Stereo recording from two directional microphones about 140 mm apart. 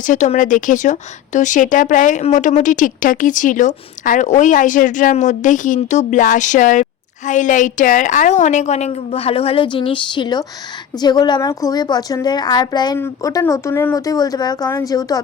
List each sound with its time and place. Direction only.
0.0 s a woman's voice: 65° left (ahead or behind); by 13.0 s 30° left (ahead or behind)
13.0 s speech: 20° left (ahead or behind)